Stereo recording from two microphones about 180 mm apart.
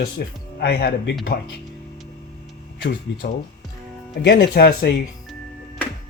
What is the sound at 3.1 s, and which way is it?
Speech, 90° left.